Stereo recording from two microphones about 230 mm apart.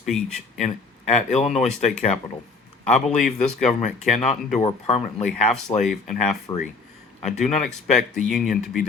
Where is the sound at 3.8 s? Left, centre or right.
Left.